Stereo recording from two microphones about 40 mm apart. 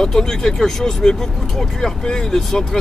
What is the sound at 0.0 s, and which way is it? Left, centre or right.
Speech, centre.